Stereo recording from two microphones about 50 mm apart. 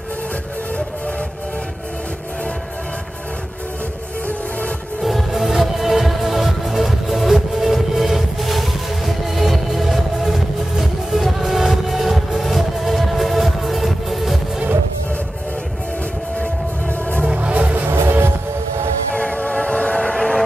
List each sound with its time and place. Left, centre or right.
5.0 s music: centre
17.3 s music: right
17.8 s music: right
19.1 s train: left